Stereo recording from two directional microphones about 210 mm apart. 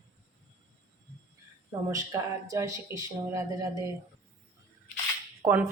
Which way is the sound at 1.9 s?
15° right (ahead or behind).